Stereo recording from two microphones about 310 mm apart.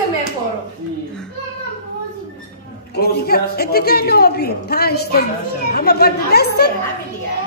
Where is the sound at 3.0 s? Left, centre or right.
Left.